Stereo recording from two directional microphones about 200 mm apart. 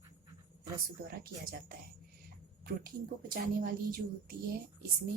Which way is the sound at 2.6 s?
45° right (ahead or behind).